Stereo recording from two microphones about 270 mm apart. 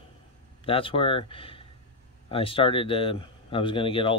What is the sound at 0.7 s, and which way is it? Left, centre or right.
Speech, centre.